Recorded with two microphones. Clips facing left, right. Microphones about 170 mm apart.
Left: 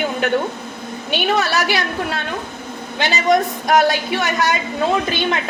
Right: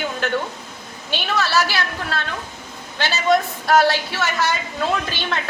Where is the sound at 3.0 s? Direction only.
15° left (ahead or behind).